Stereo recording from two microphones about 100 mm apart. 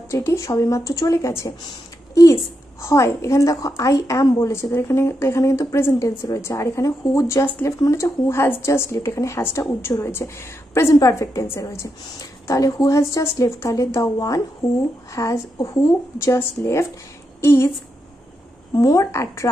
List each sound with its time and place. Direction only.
0.1 s a woman's voice: 30° left (ahead or behind)
2.8 s a woman's voice: 30° left (ahead or behind)
18.8 s a woman's voice: 35° left (ahead or behind)